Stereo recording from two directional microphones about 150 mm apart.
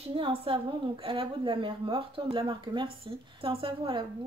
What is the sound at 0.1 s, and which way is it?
A woman's voice, 35° right (ahead or behind).